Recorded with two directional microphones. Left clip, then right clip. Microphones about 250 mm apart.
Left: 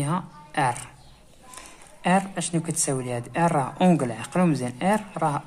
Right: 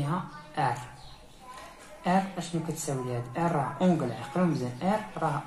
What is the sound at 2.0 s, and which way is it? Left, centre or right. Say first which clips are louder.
Speech: left 5 dB; left.